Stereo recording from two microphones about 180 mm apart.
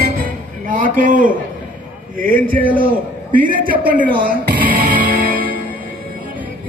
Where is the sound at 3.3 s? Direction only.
50° right (ahead or behind).